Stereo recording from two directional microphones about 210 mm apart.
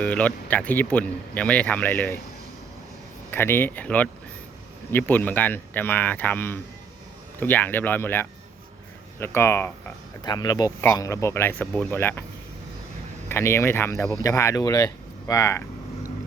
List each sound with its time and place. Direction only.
0.0 s speech: 5° left (ahead or behind)
3.3 s speech: 10° left (ahead or behind)
13.2 s speech: 10° left (ahead or behind)